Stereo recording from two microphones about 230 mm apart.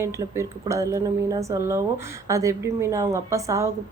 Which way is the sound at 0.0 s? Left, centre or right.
Centre.